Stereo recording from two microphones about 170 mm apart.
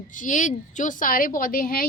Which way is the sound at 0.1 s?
50° left (ahead or behind).